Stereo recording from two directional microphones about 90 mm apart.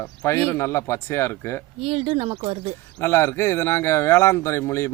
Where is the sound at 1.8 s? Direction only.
90° right.